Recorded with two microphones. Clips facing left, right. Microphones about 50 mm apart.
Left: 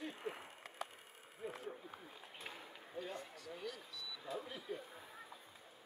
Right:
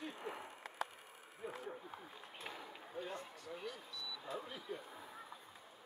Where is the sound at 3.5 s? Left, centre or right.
Right.